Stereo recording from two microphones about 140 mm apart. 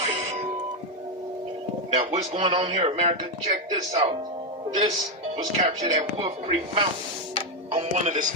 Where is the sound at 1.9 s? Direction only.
45° right (ahead or behind).